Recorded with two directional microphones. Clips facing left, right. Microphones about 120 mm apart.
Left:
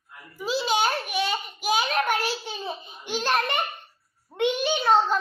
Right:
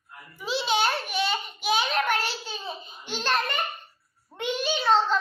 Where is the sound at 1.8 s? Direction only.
10° left (ahead or behind).